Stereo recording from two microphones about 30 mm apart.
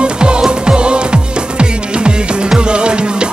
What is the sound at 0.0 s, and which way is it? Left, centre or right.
Music, right.